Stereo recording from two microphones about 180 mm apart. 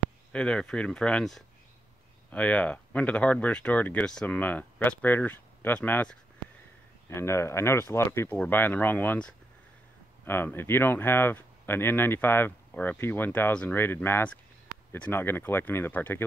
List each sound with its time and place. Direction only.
0.3 s speech: 5° left (ahead or behind)